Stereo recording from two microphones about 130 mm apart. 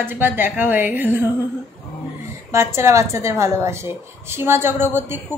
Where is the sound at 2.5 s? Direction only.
20° right (ahead or behind).